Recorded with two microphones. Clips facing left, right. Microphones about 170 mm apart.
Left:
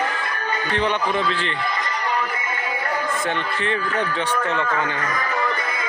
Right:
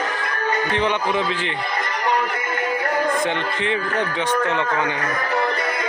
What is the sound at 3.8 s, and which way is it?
Speech, 50° right (ahead or behind).